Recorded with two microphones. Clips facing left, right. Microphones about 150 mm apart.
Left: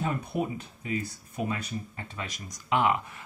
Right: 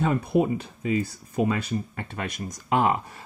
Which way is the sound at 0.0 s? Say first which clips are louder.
Right 8 dB; 90° right.